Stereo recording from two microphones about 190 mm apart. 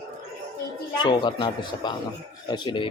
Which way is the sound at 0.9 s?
25° left (ahead or behind).